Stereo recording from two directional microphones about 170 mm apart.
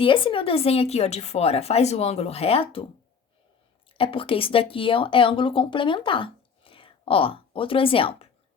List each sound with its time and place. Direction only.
0.0 s a woman's voice: 30° left (ahead or behind)
3.9 s speech: 30° left (ahead or behind)